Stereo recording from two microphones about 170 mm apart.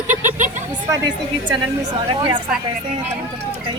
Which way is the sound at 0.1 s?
50° right (ahead or behind).